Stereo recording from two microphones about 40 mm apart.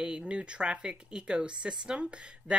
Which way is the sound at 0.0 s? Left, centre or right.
Right.